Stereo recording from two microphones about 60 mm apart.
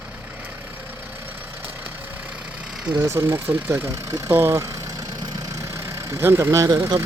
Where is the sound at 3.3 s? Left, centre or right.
Right.